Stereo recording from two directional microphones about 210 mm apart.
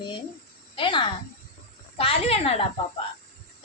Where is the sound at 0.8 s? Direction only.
25° left (ahead or behind).